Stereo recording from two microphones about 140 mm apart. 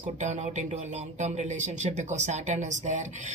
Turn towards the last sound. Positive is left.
turn(degrees=-60)  # may be behind; listen again after turning